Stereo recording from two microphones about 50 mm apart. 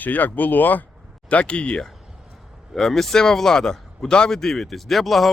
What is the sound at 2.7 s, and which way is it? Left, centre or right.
Speech, centre.